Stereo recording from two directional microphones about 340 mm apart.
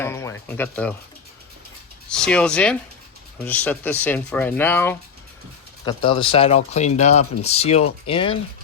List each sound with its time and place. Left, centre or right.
0.0 s speech: centre
2.0 s speech: centre